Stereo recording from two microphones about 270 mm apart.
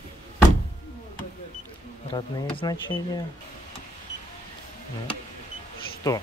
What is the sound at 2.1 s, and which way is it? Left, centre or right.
Speech, centre.